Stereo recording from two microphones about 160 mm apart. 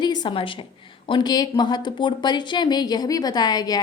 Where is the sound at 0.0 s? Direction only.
25° left (ahead or behind).